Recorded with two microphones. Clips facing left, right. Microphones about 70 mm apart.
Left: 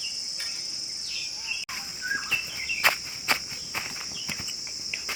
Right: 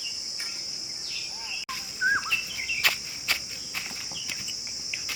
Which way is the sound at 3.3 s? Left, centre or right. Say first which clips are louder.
Left 4 dB; left.